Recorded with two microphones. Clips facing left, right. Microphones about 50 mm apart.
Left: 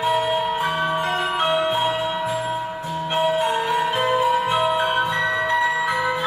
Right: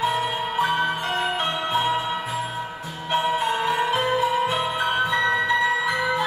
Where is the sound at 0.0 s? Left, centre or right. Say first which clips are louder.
Left 3 dB; left.